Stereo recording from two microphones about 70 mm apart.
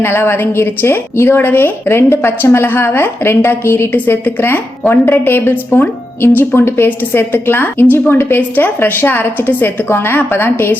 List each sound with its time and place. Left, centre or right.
0.0 s a woman's voice: left